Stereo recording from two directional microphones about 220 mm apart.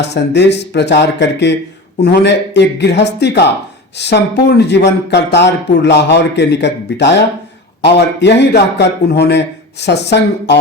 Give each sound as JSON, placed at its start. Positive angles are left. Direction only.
{"t": 0.1, "sound": "a man's voice", "side_deg": 50}